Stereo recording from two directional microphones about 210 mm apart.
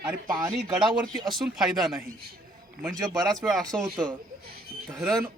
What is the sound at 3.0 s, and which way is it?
Speech, 20° right (ahead or behind).